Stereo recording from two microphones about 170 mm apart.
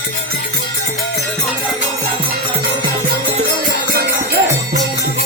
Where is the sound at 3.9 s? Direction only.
65° right (ahead or behind).